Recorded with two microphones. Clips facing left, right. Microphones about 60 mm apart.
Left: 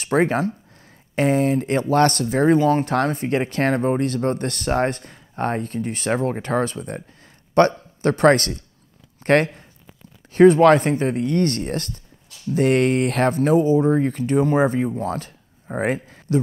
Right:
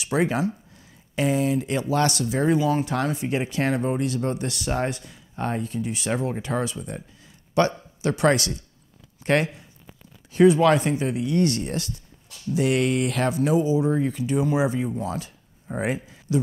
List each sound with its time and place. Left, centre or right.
0.0 s speech: left